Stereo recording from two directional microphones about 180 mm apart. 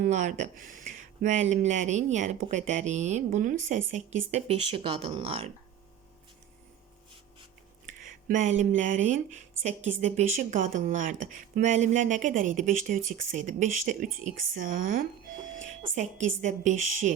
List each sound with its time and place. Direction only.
0.0 s speech: 40° right (ahead or behind)
7.9 s speech: 45° right (ahead or behind)
15.5 s a sound: 45° right (ahead or behind)
16.4 s speech: 45° right (ahead or behind)